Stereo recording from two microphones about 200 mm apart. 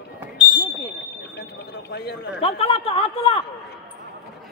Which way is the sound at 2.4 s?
30° left (ahead or behind).